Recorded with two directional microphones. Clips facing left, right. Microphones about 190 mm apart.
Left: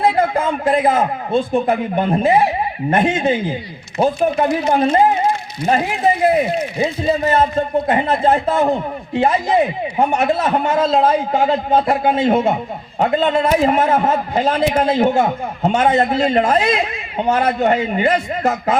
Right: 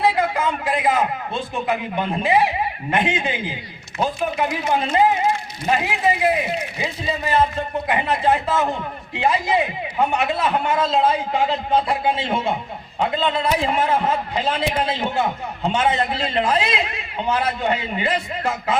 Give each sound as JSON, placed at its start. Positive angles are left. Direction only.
{"t": 0.2, "sound": "a man's voice", "side_deg": 50}